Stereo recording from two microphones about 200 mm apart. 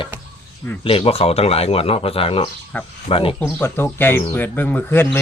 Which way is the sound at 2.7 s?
10° left (ahead or behind).